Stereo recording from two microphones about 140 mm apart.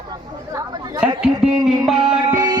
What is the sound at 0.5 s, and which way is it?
Chatter, 15° right (ahead or behind).